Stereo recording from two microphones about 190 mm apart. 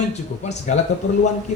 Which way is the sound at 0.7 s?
40° left (ahead or behind).